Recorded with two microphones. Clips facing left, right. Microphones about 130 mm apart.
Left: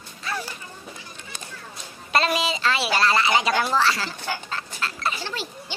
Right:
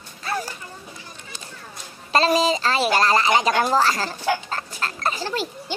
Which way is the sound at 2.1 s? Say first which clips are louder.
Right 5 dB; 35° right (ahead or behind).